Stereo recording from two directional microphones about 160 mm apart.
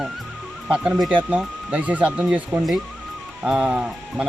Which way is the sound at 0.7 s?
5° right (ahead or behind).